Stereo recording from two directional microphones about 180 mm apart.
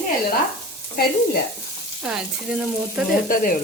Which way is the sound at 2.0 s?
5° right (ahead or behind).